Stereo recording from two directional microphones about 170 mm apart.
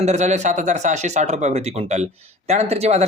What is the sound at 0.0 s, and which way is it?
Speech, 40° right (ahead or behind).